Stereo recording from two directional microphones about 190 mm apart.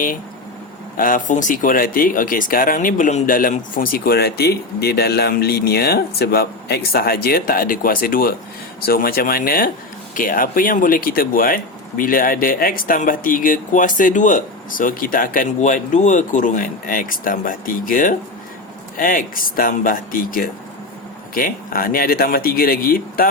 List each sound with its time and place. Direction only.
0.9 s speech: 45° left (ahead or behind)